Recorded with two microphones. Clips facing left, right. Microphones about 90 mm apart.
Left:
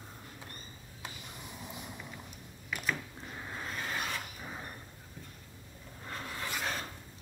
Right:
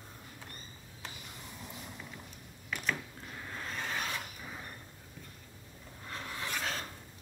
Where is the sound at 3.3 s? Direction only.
15° left (ahead or behind).